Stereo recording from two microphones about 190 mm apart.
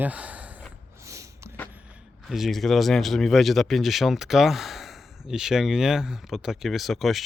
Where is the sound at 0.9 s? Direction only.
15° right (ahead or behind).